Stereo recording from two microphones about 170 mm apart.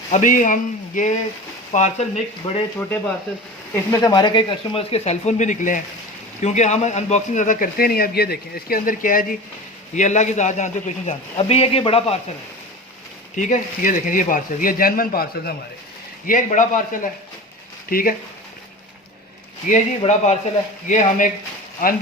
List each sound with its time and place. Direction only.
0.1 s a man's voice: 50° left (ahead or behind)
4.0 s a man's voice: 25° left (ahead or behind)
13.3 s a man's voice: 45° left (ahead or behind)
16.2 s a man's voice: 50° left (ahead or behind)
19.6 s a man's voice: 55° left (ahead or behind)
20.0 s a man's voice: 40° left (ahead or behind); by 22.0 s 55° left (ahead or behind)